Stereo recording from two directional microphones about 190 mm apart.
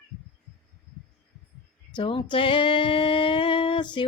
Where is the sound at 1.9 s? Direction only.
25° left (ahead or behind).